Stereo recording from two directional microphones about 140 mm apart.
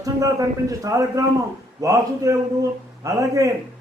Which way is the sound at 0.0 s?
25° right (ahead or behind).